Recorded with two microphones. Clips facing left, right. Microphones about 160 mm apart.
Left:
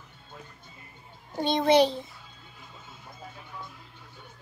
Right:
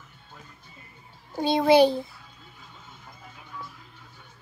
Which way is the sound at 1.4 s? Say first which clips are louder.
Right 3 dB; 5° right (ahead or behind).